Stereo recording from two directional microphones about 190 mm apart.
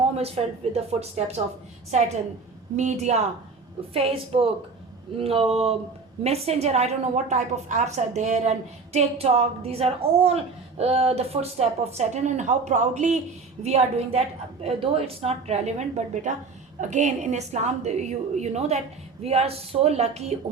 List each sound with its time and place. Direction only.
0.2 s a woman's voice: 35° right (ahead or behind)
2.7 s a woman's voice: 35° right (ahead or behind)